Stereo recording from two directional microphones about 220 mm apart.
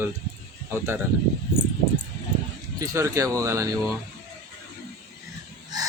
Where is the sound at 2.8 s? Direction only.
15° right (ahead or behind).